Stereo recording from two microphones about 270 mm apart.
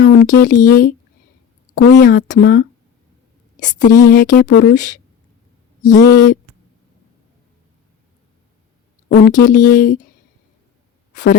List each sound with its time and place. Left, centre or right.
0.0 s a woman's voice: left
5.8 s speech: left
9.0 s speech: left
11.1 s a sound: left